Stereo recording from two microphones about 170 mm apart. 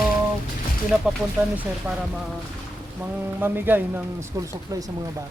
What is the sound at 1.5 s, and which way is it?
A man's voice, 5° right (ahead or behind).